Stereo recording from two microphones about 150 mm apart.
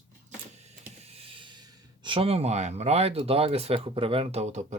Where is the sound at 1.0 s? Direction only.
40° right (ahead or behind).